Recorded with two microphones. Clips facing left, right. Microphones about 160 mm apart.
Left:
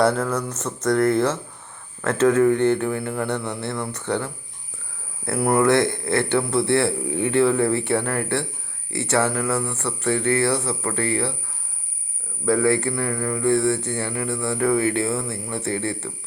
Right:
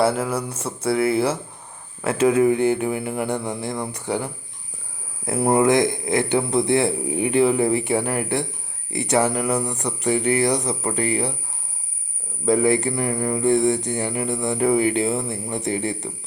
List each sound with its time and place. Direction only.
0.0 s speech: 10° right (ahead or behind)
12.5 s speech: 20° right (ahead or behind)